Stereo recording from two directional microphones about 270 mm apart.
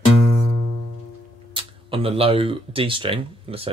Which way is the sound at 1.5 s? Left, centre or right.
Centre.